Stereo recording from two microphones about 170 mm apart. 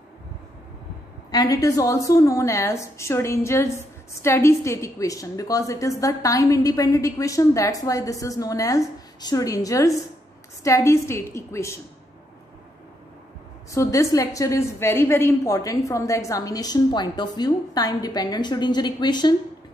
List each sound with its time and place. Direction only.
1.3 s a woman's voice: 20° left (ahead or behind)
13.7 s a woman's voice: 20° left (ahead or behind)